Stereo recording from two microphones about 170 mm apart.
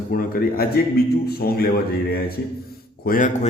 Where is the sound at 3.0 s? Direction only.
55° left (ahead or behind).